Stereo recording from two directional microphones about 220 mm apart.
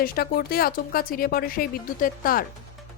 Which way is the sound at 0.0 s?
40° left (ahead or behind).